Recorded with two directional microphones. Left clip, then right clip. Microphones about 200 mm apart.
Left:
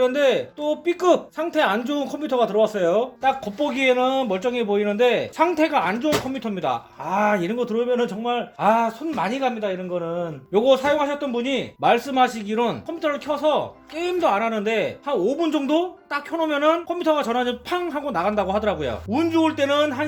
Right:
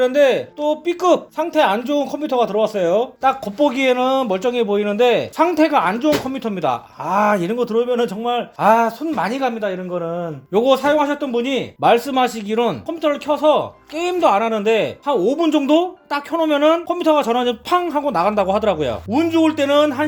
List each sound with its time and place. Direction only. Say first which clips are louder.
0.0 s speech: right 4 dB; 20° right (ahead or behind)
3.2 s a man's voice: right 5 dB; 35° right (ahead or behind)